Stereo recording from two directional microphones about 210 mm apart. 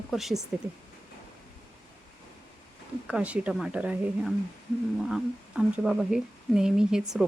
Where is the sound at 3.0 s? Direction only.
5° right (ahead or behind).